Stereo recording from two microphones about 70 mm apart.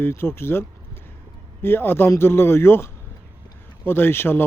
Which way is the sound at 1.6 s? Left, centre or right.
Left.